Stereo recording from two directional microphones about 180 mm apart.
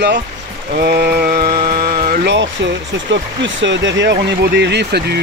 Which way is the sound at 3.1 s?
90° right.